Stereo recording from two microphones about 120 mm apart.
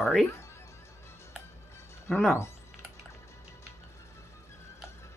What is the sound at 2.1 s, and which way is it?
Speech, 15° left (ahead or behind).